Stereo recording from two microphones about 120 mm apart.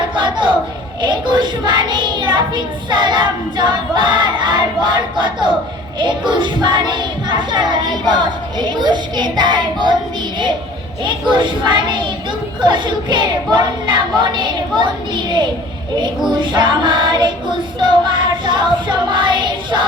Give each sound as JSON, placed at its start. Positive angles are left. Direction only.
{"t": 0.2, "sound": "a sound", "side_deg": -40}
{"t": 1.0, "sound": "a child's voice", "side_deg": -40}
{"t": 11.0, "sound": "a child's voice", "side_deg": -40}